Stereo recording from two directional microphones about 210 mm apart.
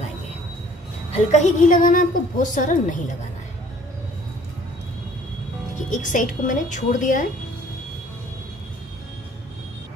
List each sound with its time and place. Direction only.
1.1 s a woman's voice: 35° left (ahead or behind)
5.9 s a woman's voice: 35° left (ahead or behind)